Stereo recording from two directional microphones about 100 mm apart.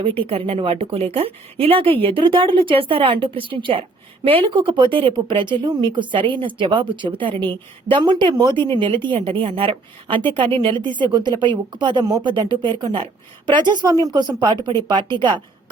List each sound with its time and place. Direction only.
0.3 s speech: 70° right (ahead or behind); by 15.4 s 50° right (ahead or behind)